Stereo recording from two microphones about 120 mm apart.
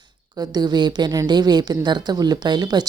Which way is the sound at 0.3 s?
35° right (ahead or behind).